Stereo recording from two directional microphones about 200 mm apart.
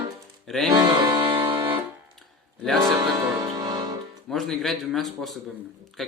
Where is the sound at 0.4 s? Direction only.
Centre (ahead or behind).